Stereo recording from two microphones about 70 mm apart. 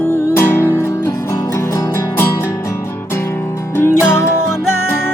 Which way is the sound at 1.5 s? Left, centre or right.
Left.